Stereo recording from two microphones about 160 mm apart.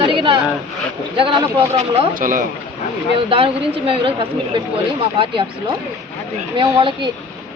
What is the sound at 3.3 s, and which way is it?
Speech, 35° right (ahead or behind).